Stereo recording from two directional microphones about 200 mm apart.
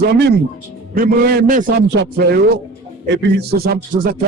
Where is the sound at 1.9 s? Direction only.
50° right (ahead or behind).